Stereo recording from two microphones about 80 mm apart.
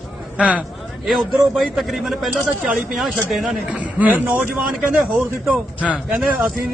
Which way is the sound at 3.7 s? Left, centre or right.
Centre.